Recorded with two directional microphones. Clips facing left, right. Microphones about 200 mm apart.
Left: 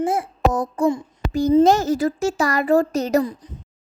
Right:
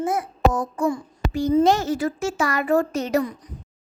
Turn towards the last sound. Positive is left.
turn(degrees=35)  # may be behind; listen again after turning